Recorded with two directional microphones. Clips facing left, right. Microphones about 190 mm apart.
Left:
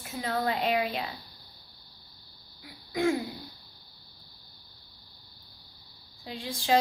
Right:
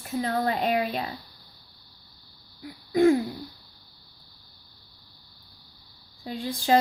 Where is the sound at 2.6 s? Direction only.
40° right (ahead or behind).